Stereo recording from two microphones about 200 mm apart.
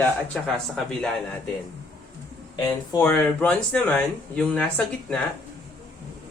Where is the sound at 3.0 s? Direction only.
5° left (ahead or behind).